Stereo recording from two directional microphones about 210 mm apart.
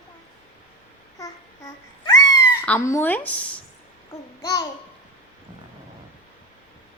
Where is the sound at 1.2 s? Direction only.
15° left (ahead or behind).